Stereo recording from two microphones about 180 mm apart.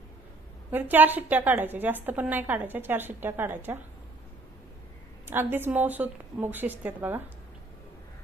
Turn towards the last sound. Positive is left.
turn(degrees=-10)  # may be behind; listen again after turning